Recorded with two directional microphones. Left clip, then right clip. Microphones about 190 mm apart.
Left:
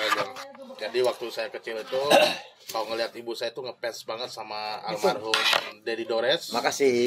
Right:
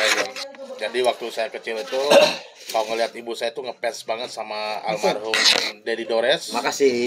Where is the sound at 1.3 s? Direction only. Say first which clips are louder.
Right 6 dB; 25° left (ahead or behind).